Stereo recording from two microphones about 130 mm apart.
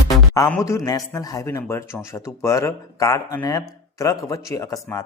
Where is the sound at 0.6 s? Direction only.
25° left (ahead or behind).